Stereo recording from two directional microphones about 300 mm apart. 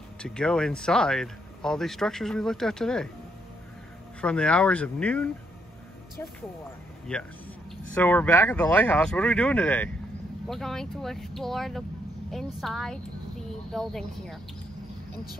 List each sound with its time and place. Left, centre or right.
0.2 s speech: centre
4.2 s speech: centre
7.1 s speech: centre